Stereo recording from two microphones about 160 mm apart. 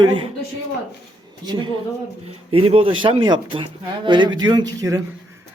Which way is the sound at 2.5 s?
35° right (ahead or behind).